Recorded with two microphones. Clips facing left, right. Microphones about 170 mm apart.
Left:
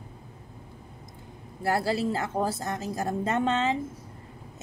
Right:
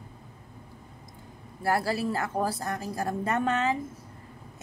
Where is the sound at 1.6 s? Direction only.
25° left (ahead or behind).